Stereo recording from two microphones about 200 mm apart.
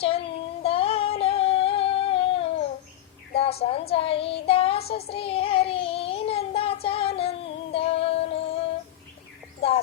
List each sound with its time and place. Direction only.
0.0 s female singing: 30° left (ahead or behind)
3.3 s a woman's voice: 30° left (ahead or behind)
4.4 s child singing: 30° left (ahead or behind)
6.8 s music: 30° left (ahead or behind)
9.6 s bird: 30° left (ahead or behind)